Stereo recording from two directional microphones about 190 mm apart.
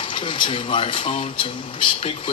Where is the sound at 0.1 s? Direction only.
25° left (ahead or behind).